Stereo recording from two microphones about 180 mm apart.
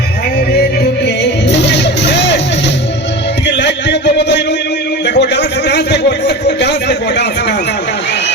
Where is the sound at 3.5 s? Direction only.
70° left (ahead or behind).